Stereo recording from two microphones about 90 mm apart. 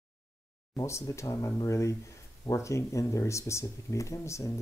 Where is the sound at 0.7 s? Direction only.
35° left (ahead or behind).